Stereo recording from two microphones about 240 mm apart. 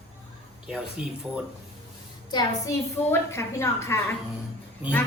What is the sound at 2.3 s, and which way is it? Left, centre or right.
Speech, centre.